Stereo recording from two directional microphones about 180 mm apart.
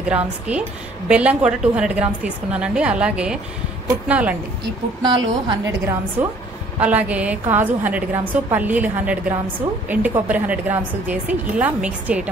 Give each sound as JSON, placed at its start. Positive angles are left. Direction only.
{"t": 0.1, "sound": "a woman's voice", "side_deg": -5}
{"t": 5.0, "sound": "a woman's voice", "side_deg": -25}
{"t": 6.8, "sound": "a woman's voice", "side_deg": -10}